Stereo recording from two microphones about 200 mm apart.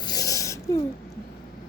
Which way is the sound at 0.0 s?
20° left (ahead or behind).